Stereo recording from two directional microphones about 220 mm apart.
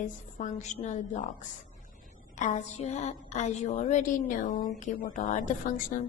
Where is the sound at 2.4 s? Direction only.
30° left (ahead or behind).